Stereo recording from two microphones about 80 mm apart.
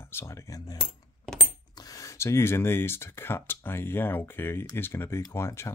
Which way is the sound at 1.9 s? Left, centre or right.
Left.